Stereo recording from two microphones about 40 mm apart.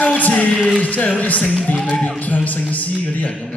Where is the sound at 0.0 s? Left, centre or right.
Left.